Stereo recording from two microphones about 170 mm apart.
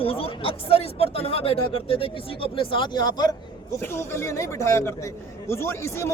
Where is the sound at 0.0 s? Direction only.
35° left (ahead or behind).